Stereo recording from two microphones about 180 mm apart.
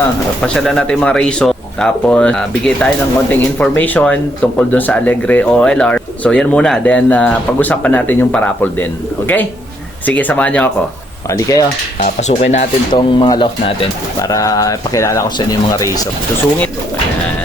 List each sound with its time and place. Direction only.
0.4 s speech: centre (ahead or behind)
11.3 s speech: 20° left (ahead or behind)
11.9 s speech: 45° left (ahead or behind)
12.9 s speech: 25° left (ahead or behind)